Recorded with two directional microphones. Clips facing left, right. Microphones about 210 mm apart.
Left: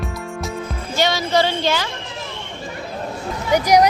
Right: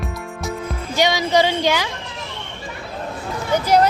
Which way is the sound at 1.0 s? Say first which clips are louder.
Right 1 dB; 15° right (ahead or behind).